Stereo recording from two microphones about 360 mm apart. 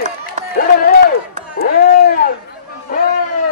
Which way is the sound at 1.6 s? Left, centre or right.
Left.